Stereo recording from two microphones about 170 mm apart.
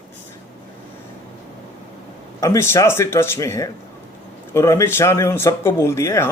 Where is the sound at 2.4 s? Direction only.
15° left (ahead or behind).